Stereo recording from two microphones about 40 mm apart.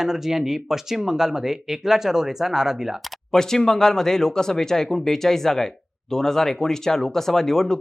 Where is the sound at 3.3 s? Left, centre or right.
Centre.